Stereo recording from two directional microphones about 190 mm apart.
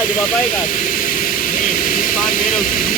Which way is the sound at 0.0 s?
45° left (ahead or behind).